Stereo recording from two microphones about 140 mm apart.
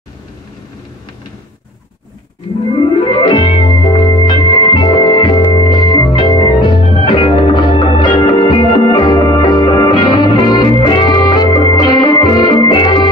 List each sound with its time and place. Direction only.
2.7 s music: 35° left (ahead or behind)
5.5 s organ: 35° left (ahead or behind)